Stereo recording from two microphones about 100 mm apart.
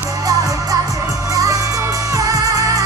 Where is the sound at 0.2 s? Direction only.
35° right (ahead or behind).